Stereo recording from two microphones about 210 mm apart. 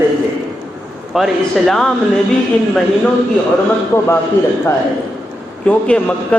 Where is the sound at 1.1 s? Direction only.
Centre (ahead or behind).